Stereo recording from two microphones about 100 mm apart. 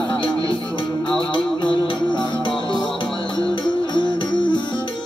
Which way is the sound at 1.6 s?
55° left (ahead or behind).